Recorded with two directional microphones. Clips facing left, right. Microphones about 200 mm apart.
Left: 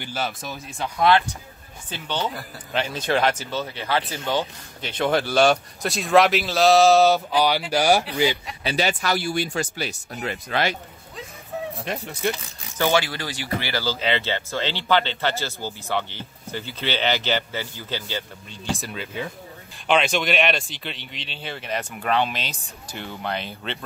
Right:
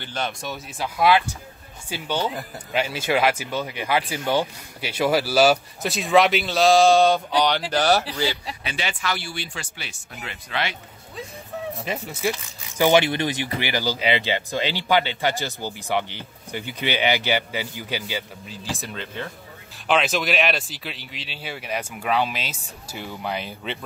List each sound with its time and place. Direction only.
0.0 s speech: 5° left (ahead or behind)
8.6 s speech: 40° left (ahead or behind)
12.1 s speech: 5° right (ahead or behind)